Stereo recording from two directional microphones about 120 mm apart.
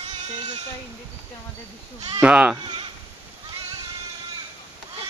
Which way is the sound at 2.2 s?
5° right (ahead or behind).